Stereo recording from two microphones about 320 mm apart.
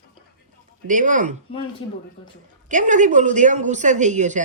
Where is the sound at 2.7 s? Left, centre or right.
Right.